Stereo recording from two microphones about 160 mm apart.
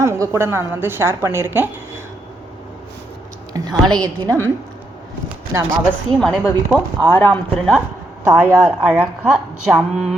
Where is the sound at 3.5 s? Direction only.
25° right (ahead or behind).